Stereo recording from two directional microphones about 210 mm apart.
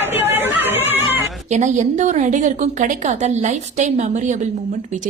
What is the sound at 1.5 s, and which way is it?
A woman's voice, 35° right (ahead or behind).